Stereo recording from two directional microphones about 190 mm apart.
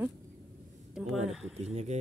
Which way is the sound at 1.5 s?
35° right (ahead or behind).